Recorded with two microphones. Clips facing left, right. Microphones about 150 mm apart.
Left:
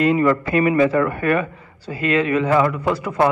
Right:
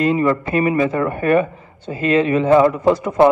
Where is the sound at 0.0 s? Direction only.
30° right (ahead or behind).